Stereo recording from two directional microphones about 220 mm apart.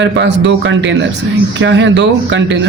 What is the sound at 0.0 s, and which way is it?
Speech, 55° right (ahead or behind).